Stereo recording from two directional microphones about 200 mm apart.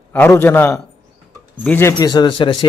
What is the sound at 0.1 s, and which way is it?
A man's voice, 10° left (ahead or behind).